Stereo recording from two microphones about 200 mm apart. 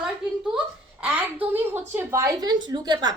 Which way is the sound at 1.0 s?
10° right (ahead or behind).